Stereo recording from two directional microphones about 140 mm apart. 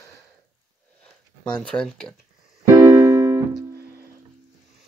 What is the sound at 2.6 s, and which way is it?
Keyboard, 20° right (ahead or behind).